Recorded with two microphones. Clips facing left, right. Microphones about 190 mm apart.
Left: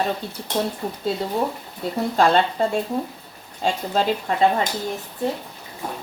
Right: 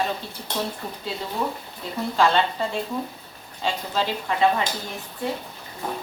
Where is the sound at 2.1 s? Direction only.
45° left (ahead or behind).